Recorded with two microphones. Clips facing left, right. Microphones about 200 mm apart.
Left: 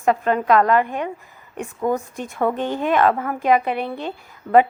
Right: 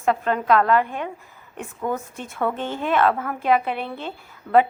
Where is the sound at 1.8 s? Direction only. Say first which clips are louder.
Left 5 dB; 15° left (ahead or behind).